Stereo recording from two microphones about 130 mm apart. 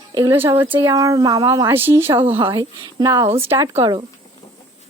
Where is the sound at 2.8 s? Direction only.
35° right (ahead or behind).